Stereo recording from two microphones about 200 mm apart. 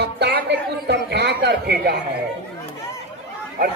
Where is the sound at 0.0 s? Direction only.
55° right (ahead or behind).